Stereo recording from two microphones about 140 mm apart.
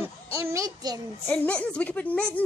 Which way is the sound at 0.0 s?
20° right (ahead or behind).